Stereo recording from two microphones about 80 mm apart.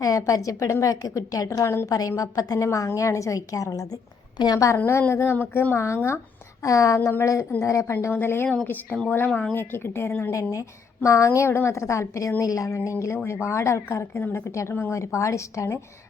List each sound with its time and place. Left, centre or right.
0.0 s a woman's voice: left
1.9 s a woman's voice: left
5.1 s a woman's voice: left
7.0 s a woman's voice: left
10.3 s a woman's voice: left